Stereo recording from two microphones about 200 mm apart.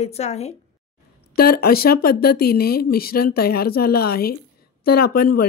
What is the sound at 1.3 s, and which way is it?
Speech, 50° left (ahead or behind).